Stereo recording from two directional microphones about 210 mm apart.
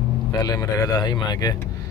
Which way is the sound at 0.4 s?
15° left (ahead or behind).